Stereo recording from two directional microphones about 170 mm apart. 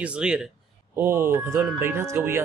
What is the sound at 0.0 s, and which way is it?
Speech, 5° right (ahead or behind).